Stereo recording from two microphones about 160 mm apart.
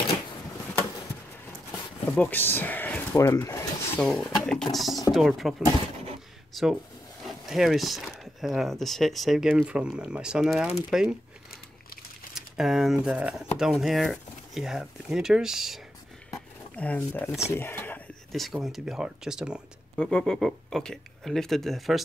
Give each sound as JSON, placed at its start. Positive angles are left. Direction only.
{"t": 2.1, "sound": "speech", "side_deg": 10}
{"t": 4.0, "sound": "speech", "side_deg": 0}
{"t": 12.4, "sound": "speech", "side_deg": -5}
{"t": 16.7, "sound": "speech", "side_deg": 10}
{"t": 17.5, "sound": "a sound", "side_deg": 15}
{"t": 18.3, "sound": "speech", "side_deg": 0}